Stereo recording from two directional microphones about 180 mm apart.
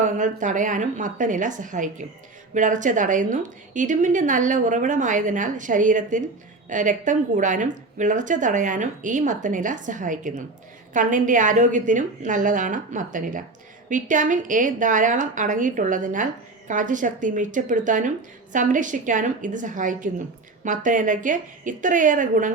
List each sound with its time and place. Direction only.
0.0 s a woman's voice: 45° right (ahead or behind)